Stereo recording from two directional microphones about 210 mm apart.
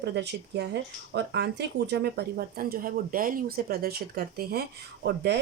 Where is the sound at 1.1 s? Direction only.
55° right (ahead or behind).